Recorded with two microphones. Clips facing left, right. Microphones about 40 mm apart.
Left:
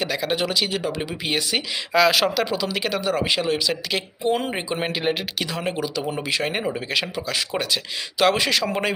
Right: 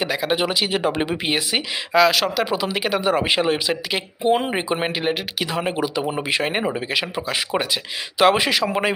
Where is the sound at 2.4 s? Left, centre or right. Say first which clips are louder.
Right 2 dB; centre.